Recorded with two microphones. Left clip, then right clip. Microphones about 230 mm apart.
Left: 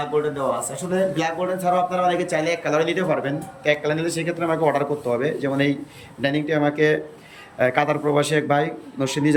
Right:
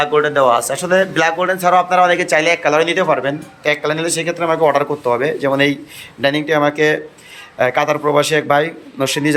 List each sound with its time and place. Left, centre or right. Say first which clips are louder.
0.0 s a man's voice: right 10 dB; centre